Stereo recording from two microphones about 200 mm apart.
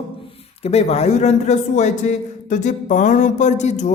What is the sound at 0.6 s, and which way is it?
Mantra, 30° left (ahead or behind).